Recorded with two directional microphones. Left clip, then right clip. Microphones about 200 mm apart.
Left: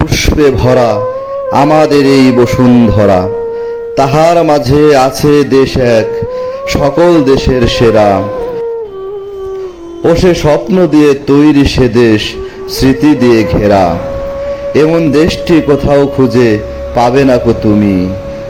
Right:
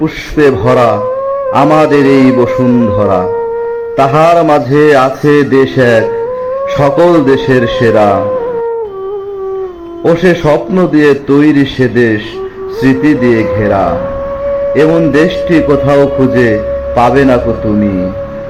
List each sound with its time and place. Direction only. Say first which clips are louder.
0.3 s a man's voice: right 1 dB; 45° left (ahead or behind)
1.9 s a man's voice: even; 50° left (ahead or behind)
10.0 s a man's voice: left 1 dB; 40° left (ahead or behind)
10.9 s a man's voice: even; 50° left (ahead or behind)
15.1 s a man's voice: even; 50° left (ahead or behind)